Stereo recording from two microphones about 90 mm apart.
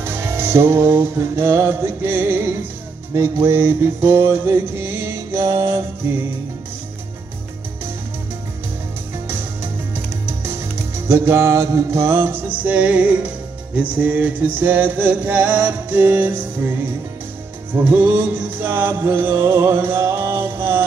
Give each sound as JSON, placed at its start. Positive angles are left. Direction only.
{"t": 0.0, "sound": "music", "side_deg": -25}
{"t": 11.1, "sound": "music", "side_deg": -30}
{"t": 17.7, "sound": "music", "side_deg": -20}